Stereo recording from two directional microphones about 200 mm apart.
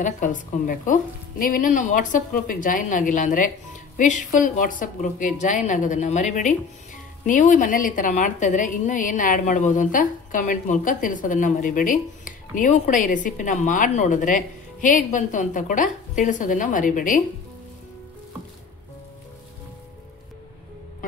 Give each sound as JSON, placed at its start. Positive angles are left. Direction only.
{"t": 0.0, "sound": "a woman's voice", "side_deg": 40}